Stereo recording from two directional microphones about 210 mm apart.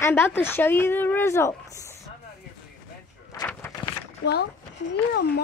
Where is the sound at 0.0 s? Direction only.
10° left (ahead or behind).